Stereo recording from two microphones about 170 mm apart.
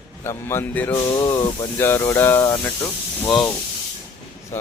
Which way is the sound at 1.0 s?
25° left (ahead or behind).